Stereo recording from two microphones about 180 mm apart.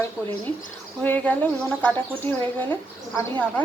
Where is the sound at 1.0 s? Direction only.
10° left (ahead or behind).